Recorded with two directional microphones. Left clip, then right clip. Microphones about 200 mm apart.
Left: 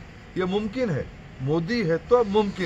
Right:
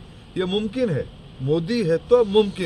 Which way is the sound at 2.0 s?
5° right (ahead or behind).